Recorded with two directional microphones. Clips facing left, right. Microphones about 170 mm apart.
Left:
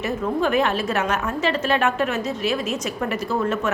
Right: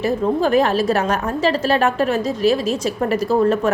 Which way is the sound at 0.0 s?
35° right (ahead or behind).